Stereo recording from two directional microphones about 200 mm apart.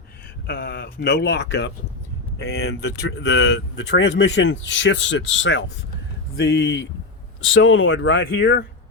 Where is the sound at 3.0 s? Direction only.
60° left (ahead or behind).